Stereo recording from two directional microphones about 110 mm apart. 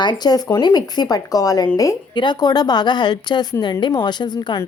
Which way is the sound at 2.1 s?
45° left (ahead or behind).